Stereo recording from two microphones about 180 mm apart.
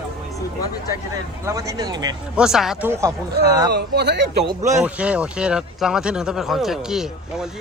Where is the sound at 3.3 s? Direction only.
65° right (ahead or behind).